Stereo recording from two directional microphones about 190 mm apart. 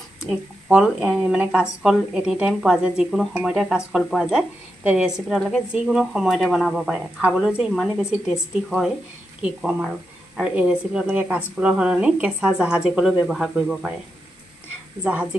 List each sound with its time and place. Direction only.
0.7 s speech: 5° right (ahead or behind)